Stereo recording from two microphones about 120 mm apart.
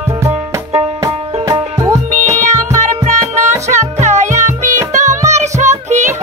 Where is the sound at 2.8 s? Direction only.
85° right.